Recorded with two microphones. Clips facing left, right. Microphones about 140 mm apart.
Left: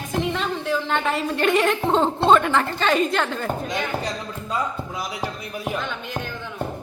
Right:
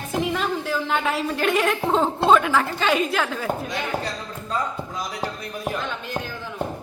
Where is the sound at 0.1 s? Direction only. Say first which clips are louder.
Right 1 dB; 5° right (ahead or behind).